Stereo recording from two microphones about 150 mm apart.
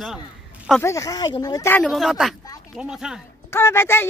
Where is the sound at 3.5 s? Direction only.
15° left (ahead or behind).